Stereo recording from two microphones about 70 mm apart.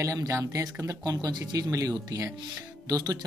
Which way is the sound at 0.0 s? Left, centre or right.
Right.